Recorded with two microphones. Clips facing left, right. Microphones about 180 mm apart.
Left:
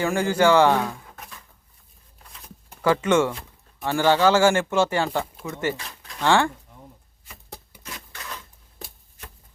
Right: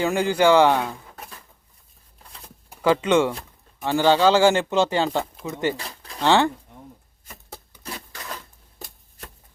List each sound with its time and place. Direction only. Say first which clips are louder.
0.0 s speech: right 1 dB; 15° right (ahead or behind)
2.6 s speech: right 1 dB; 15° right (ahead or behind)
5.7 s a sound: right 3 dB; 35° right (ahead or behind)
6.2 s speech: right 2 dB; 20° right (ahead or behind)